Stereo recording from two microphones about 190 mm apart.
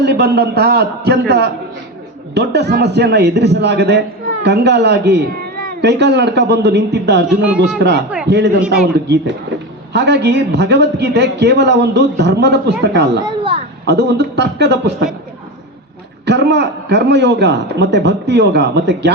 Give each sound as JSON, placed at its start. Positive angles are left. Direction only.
{"t": 0.0, "sound": "speech", "side_deg": -60}
{"t": 13.1, "sound": "a sound", "side_deg": -30}
{"t": 13.8, "sound": "speech", "side_deg": -60}
{"t": 16.2, "sound": "a man's voice", "side_deg": -65}